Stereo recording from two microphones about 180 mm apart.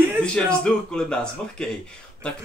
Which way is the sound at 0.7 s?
5° left (ahead or behind).